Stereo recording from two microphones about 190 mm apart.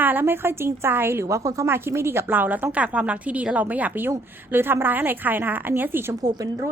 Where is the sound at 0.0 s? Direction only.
10° right (ahead or behind).